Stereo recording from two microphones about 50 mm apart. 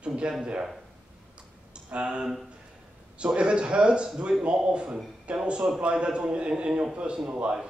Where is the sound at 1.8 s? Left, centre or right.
Right.